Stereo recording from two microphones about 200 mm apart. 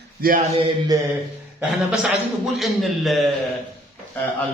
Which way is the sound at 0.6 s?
20° right (ahead or behind).